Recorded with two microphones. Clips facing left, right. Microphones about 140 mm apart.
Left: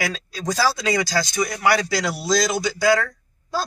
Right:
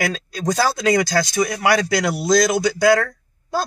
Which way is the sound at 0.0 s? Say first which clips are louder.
Right 4 dB; 50° right (ahead or behind).